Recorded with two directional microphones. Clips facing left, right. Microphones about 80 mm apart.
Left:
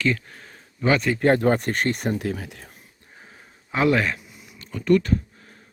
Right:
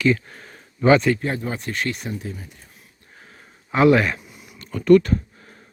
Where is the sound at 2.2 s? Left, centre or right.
Left.